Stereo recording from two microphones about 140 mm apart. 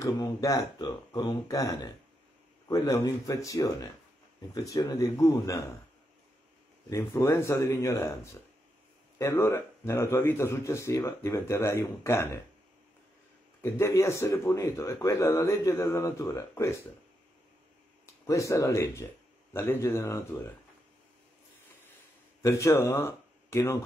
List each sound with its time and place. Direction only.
0.0 s a man's voice: 25° left (ahead or behind)
6.9 s a man's voice: 20° left (ahead or behind)
13.6 s a man's voice: 20° left (ahead or behind)
18.2 s a man's voice: 20° left (ahead or behind)
22.4 s speech: 20° left (ahead or behind)